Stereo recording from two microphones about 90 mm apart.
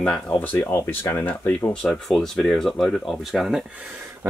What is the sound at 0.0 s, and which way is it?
Speech, 10° left (ahead or behind).